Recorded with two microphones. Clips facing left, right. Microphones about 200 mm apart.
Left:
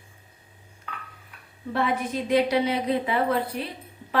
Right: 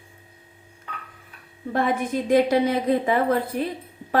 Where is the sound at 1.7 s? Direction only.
45° right (ahead or behind).